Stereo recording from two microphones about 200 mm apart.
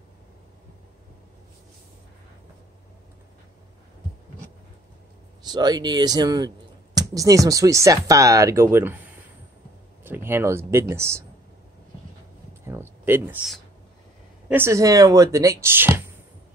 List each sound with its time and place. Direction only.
5.4 s speech: 20° right (ahead or behind)
10.0 s speech: 10° right (ahead or behind)
12.6 s a sound: 10° right (ahead or behind)
14.5 s speech: 15° right (ahead or behind)